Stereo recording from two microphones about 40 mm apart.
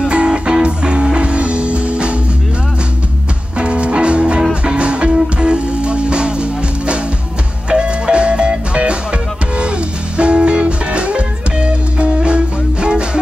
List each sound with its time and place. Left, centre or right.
0.1 s music: right
3.5 s music: right